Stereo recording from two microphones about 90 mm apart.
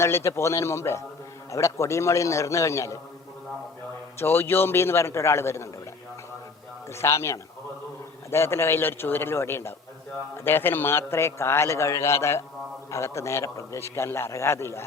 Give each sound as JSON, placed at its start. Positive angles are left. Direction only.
{"t": 0.0, "sound": "a man's voice", "side_deg": 30}
{"t": 4.2, "sound": "a man's voice", "side_deg": 25}
{"t": 6.9, "sound": "a man's voice", "side_deg": 30}